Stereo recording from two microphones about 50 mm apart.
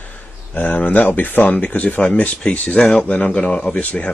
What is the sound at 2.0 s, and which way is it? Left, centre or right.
Speech, left.